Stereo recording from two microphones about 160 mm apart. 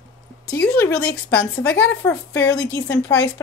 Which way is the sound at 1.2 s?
10° left (ahead or behind).